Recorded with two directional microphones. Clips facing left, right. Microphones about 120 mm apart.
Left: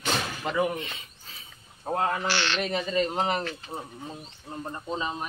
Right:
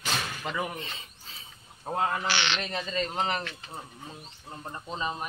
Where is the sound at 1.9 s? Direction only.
Centre (ahead or behind).